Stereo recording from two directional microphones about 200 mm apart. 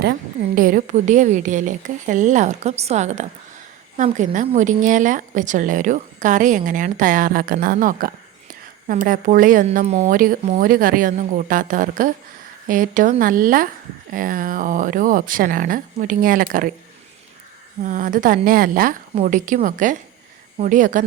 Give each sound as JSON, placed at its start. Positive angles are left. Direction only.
{"t": 0.0, "sound": "a woman's voice", "side_deg": -45}
{"t": 17.8, "sound": "a woman's voice", "side_deg": -40}